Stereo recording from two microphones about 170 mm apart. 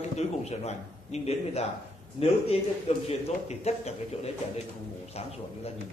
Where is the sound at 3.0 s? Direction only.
40° left (ahead or behind).